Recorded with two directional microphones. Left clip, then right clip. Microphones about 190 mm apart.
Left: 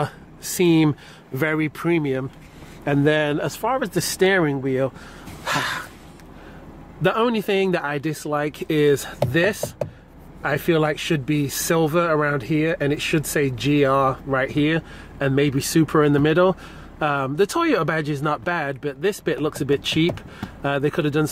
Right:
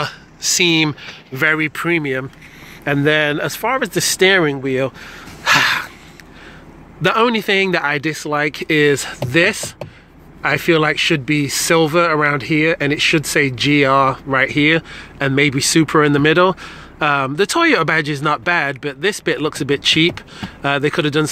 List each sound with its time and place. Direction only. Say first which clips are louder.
0.0 s speech: right 6 dB; 30° left (ahead or behind); by 2.2 s 10° left (ahead or behind)
2.8 s speech: right 4 dB; centre (ahead or behind)
5.4 s gasp: right 10 dB; 15° right (ahead or behind)
7.0 s speech: right 5 dB; 10° right (ahead or behind)